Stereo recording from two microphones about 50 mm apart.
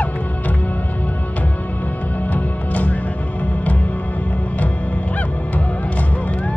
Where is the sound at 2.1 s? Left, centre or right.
Left.